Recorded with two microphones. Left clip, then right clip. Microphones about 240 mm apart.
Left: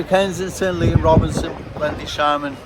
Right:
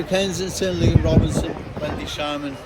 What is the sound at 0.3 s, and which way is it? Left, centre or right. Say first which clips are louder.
Speech: left 2 dB; centre.